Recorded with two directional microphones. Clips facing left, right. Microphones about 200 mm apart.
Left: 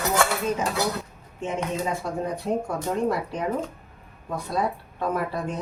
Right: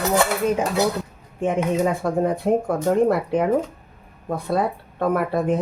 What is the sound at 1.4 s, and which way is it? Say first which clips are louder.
Speech: right 7 dB; 55° right (ahead or behind).